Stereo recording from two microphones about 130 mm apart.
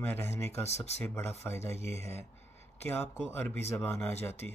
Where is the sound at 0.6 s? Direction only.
55° left (ahead or behind).